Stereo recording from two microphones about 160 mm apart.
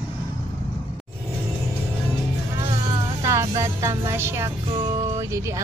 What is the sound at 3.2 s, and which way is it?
Music, 20° right (ahead or behind).